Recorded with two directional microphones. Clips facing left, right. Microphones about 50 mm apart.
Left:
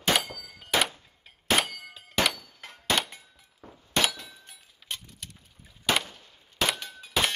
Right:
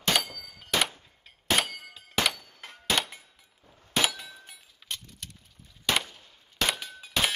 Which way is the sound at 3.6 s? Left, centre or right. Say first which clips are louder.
Left 10 dB; left.